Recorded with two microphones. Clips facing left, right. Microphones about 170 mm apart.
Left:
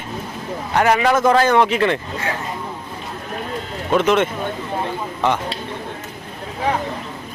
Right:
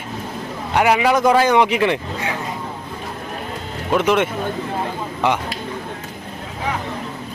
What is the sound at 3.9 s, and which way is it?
Speech, 10° right (ahead or behind).